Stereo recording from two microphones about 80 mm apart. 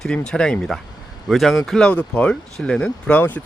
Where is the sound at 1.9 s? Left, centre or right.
Centre.